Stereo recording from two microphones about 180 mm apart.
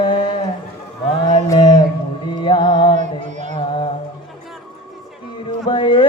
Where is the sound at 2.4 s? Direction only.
25° left (ahead or behind).